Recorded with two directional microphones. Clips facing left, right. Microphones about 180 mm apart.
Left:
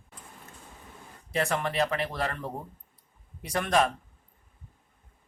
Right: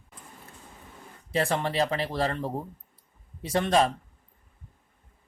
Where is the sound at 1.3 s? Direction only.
30° right (ahead or behind).